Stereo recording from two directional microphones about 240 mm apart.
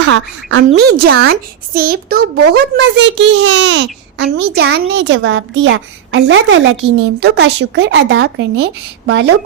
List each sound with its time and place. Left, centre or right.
0.0 s speech: right
0.6 s a child's voice: right